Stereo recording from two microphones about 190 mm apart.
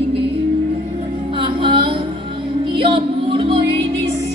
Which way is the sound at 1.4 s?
25° right (ahead or behind).